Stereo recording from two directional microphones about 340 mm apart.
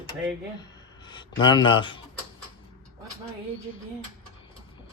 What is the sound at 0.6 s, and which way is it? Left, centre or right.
Speech, centre.